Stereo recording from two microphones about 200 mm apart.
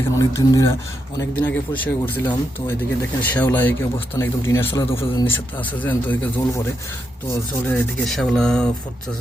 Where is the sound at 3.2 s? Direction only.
10° left (ahead or behind).